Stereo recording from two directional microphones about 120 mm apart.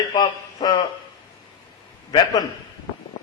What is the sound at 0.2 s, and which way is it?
Speech, 35° left (ahead or behind).